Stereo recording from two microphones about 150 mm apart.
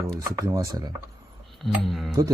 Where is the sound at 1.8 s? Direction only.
Centre (ahead or behind).